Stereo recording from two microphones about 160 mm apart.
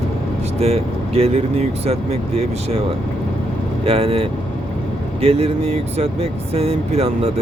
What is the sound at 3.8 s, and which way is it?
Speech, 35° right (ahead or behind).